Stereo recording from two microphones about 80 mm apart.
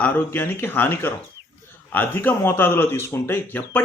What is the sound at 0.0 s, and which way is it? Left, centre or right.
Speech, left.